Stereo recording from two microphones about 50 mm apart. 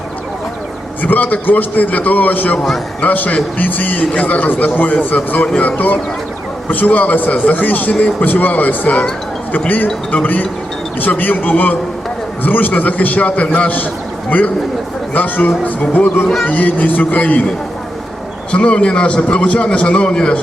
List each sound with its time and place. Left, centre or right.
1.0 s a man's voice: left
15.9 s music: left
16.5 s a man's voice: left
18.5 s a man's voice: left